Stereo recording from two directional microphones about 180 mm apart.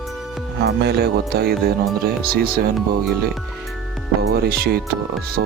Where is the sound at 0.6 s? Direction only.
65° right (ahead or behind).